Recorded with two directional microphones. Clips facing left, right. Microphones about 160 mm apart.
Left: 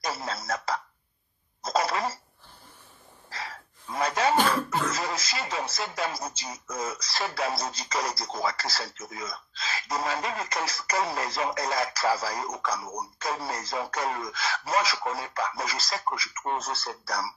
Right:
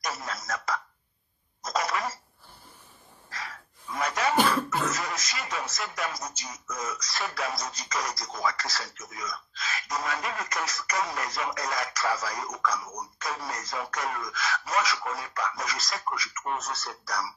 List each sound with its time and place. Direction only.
0.0 s speech: 30° left (ahead or behind)
1.6 s cough: 30° left (ahead or behind)
3.3 s gasp: 30° left (ahead or behind)
4.9 s speech: 30° left (ahead or behind)